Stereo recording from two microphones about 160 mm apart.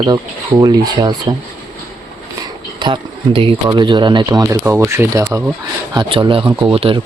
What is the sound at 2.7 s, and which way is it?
Speech, 30° right (ahead or behind).